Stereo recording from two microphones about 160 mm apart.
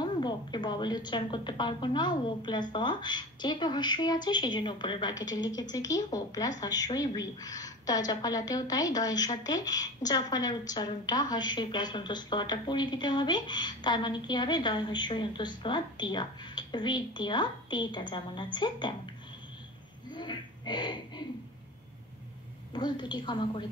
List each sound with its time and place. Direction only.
0.0 s a woman's voice: 25° left (ahead or behind)
20.2 s a sound: 30° left (ahead or behind)
22.7 s a woman's voice: 30° left (ahead or behind)